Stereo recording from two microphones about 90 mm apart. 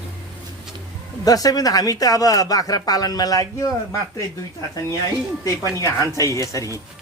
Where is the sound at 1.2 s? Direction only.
40° left (ahead or behind).